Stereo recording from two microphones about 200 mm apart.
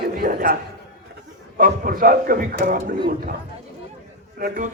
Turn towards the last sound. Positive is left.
turn(degrees=-45)  # may be behind; listen again after turning